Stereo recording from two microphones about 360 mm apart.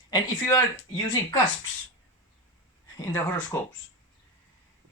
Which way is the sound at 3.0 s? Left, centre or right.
Centre.